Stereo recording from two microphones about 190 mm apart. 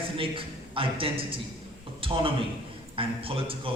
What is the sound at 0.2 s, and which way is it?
A man's voice, 30° right (ahead or behind).